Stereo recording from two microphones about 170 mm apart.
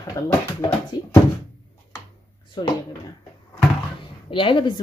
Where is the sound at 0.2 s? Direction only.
20° left (ahead or behind).